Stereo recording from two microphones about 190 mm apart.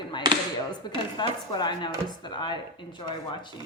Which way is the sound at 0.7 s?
25° left (ahead or behind).